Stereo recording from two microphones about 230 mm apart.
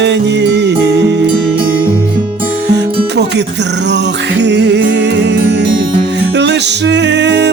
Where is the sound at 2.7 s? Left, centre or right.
Right.